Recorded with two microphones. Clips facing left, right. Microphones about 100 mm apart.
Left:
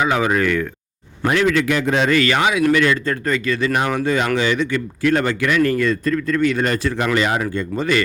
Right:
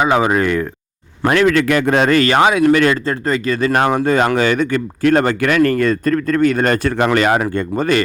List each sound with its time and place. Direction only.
0.0 s speech: 30° right (ahead or behind)
1.2 s a man's voice: 60° right (ahead or behind)